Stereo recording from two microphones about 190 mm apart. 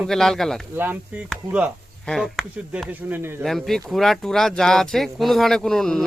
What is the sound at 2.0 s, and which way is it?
Speech, centre (ahead or behind).